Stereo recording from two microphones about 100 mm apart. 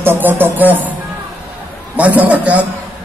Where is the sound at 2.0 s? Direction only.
15° right (ahead or behind).